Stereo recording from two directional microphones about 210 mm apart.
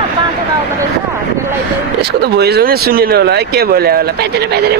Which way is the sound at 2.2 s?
50° right (ahead or behind).